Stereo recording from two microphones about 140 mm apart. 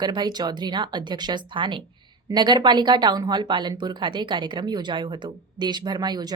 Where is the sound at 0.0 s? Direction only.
30° right (ahead or behind).